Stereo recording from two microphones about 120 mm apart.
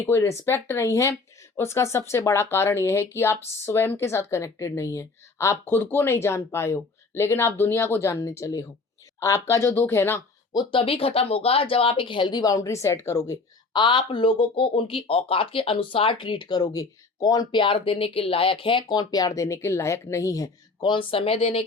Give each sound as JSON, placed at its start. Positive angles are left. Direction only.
{"t": 0.0, "sound": "speech", "side_deg": 20}
{"t": 10.5, "sound": "speech", "side_deg": 35}
{"t": 10.8, "sound": "speech", "side_deg": 50}
{"t": 13.7, "sound": "speech", "side_deg": 40}
{"t": 20.8, "sound": "speech", "side_deg": 45}